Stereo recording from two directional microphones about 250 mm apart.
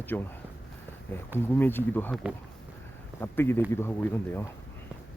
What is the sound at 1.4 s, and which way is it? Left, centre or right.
Speech, centre.